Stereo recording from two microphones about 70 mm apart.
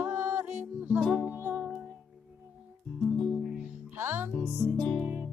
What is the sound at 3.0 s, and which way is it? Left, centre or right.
Music, centre.